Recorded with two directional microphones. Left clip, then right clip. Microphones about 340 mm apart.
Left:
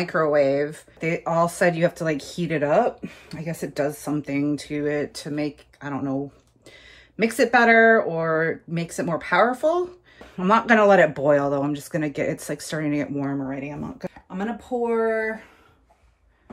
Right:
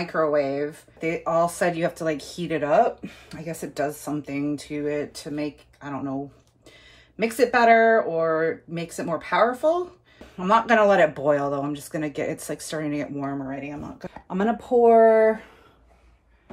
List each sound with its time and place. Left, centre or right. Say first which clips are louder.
0.0 s speech: left 3 dB; left
7.2 s speech: left 1 dB; left
14.1 s speech: right 10 dB; centre